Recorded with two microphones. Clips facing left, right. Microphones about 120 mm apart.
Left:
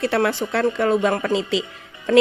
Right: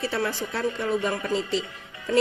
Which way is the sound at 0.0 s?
70° left (ahead or behind).